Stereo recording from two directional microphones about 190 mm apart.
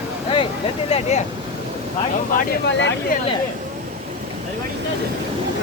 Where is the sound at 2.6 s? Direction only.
70° left (ahead or behind).